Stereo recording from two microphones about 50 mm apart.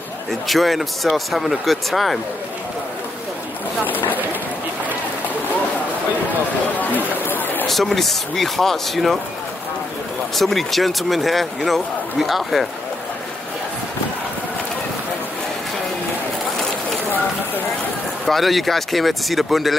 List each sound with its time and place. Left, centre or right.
0.3 s speech: centre
3.8 s speech: left
7.2 s a sound: left
7.6 s speech: centre
10.3 s speech: centre
18.2 s speech: centre